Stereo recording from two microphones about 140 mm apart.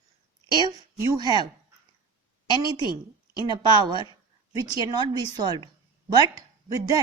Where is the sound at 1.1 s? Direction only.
30° right (ahead or behind).